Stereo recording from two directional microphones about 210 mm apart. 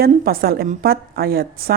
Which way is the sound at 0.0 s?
45° right (ahead or behind).